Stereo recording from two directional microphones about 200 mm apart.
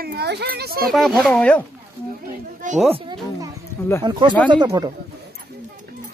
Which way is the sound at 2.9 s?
25° right (ahead or behind).